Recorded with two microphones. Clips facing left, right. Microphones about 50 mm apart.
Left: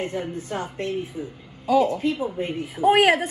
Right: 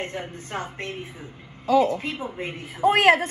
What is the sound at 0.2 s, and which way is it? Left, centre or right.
A woman's voice, right.